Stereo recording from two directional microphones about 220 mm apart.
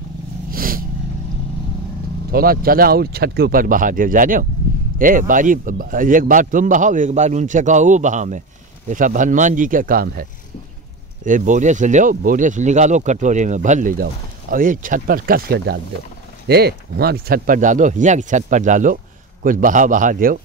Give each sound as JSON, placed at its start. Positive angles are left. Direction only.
{"t": 0.5, "sound": "vehicle", "side_deg": -40}
{"t": 2.3, "sound": "speech", "side_deg": -40}
{"t": 11.2, "sound": "speech", "side_deg": -35}